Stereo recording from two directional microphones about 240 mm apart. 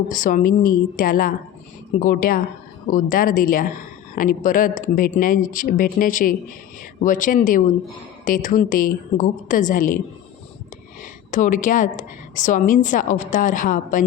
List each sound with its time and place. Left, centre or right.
0.1 s a woman's voice: left
11.3 s a woman's voice: left